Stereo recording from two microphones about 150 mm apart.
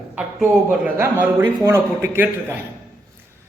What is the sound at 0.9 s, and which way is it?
A man's voice, 15° right (ahead or behind).